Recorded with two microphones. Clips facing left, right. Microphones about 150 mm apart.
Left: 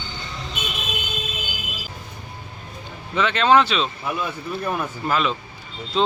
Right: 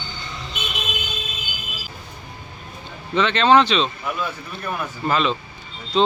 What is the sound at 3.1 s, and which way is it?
Speech, 10° left (ahead or behind).